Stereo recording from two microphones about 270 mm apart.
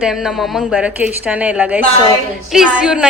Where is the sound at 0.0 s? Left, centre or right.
Centre.